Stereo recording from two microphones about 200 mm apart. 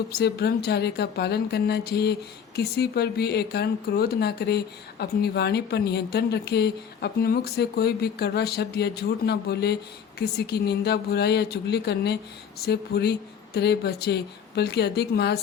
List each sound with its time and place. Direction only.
0.1 s speech: 55° left (ahead or behind)